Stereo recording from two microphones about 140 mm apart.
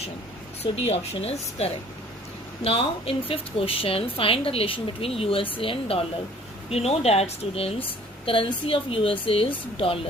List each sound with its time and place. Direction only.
0.6 s a woman's voice: 45° left (ahead or behind)